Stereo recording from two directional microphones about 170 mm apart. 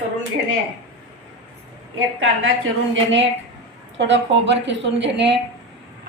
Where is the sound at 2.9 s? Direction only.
90° right.